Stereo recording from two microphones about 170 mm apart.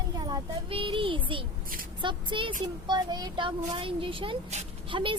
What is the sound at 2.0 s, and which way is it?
Speech, 30° right (ahead or behind).